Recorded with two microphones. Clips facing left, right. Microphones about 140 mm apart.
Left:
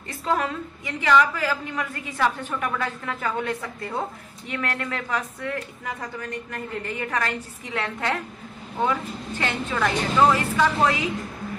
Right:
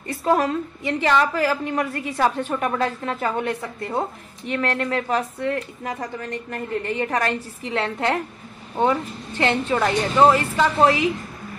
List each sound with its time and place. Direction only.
0.2 s a woman's voice: 35° right (ahead or behind)
9.4 s speech: 25° right (ahead or behind)